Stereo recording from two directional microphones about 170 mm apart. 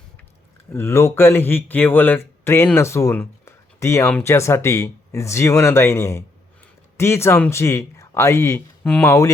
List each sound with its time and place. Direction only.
0.7 s speech: 15° left (ahead or behind)